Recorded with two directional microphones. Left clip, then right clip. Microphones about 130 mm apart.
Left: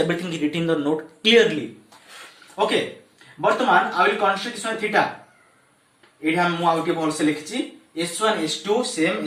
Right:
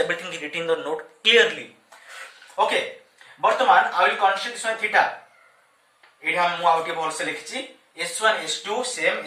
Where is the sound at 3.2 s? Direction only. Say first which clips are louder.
Even; 25° left (ahead or behind).